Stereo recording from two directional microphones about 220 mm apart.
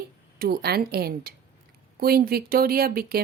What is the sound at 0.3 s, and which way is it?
Speech, 45° right (ahead or behind).